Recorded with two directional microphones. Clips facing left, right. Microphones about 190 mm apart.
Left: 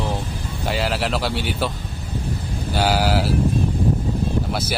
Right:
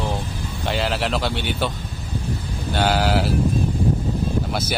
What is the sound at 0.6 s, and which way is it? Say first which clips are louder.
Speech: even; 5° left (ahead or behind).